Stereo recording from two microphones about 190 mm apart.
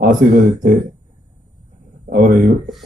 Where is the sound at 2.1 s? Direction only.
50° right (ahead or behind).